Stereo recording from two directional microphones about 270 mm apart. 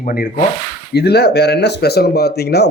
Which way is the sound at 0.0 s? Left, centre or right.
Left.